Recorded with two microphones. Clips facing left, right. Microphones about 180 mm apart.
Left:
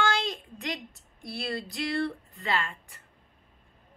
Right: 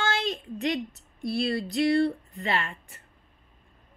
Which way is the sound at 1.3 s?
20° right (ahead or behind).